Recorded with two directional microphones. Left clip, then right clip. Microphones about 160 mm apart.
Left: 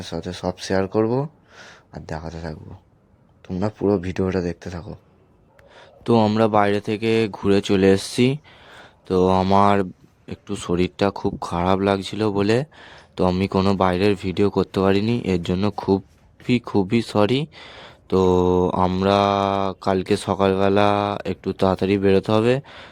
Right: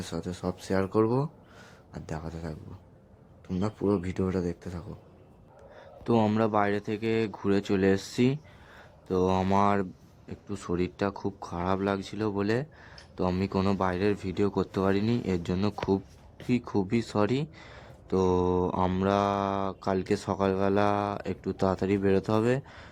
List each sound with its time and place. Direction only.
0.0 s speech: 10° left (ahead or behind)
3.6 s speech: 20° left (ahead or behind)
5.7 s speech: 35° left (ahead or behind)